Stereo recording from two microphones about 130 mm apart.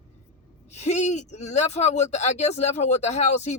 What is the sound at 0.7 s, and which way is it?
A man's voice, 60° left (ahead or behind).